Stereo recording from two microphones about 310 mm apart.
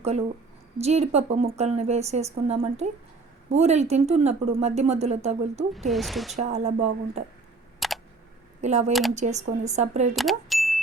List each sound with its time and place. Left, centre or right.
0.8 s a woman's voice: right
5.9 s speech: centre
6.3 s a woman's voice: right
7.8 s a sound: centre
8.6 s a woman's voice: right
8.9 s speech: centre
9.1 s a woman's voice: right
10.2 s speech: centre